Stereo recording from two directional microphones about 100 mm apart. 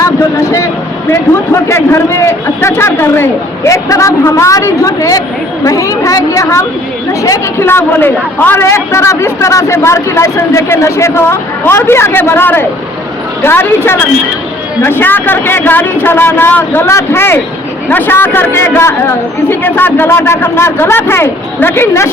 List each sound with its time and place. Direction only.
0.0 s a man's voice: 30° left (ahead or behind)